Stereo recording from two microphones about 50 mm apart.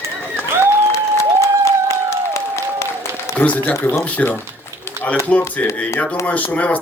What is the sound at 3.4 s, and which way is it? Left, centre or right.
Speech, left.